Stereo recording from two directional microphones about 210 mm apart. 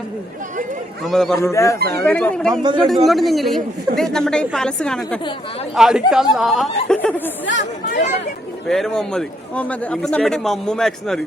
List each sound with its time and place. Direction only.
1.0 s a man's voice: centre (ahead or behind)
1.5 s a man's voice: 15° left (ahead or behind)
7.4 s speech: 60° left (ahead or behind)
8.6 s a man's voice: centre (ahead or behind)